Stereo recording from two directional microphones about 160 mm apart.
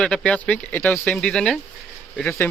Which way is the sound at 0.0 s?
5° left (ahead or behind).